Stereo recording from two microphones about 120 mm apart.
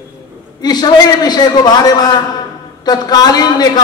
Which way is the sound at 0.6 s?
35° left (ahead or behind).